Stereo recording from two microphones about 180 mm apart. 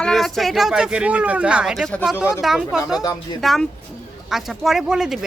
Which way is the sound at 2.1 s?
15° left (ahead or behind).